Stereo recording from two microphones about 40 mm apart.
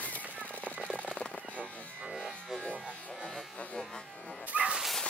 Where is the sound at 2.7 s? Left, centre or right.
Right.